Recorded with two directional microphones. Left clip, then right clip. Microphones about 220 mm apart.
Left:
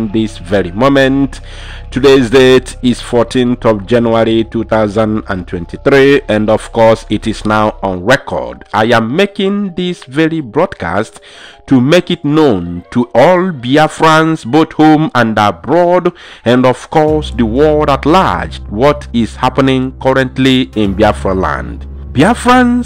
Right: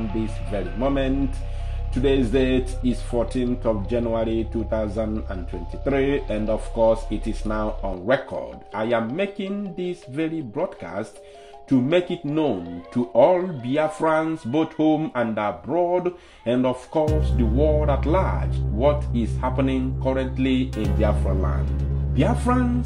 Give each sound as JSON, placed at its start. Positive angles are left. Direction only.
{"t": 0.2, "sound": "speech", "side_deg": 40}